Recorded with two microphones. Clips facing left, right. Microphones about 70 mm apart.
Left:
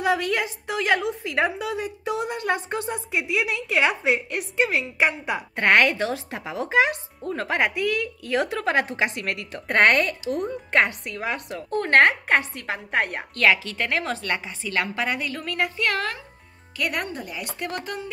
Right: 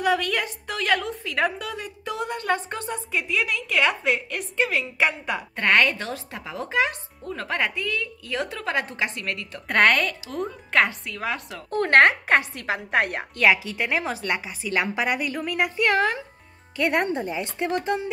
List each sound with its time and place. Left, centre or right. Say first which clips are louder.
0.0 s a woman's voice: even; centre
9.7 s a woman's voice: left 1 dB; centre; by 18.1 s right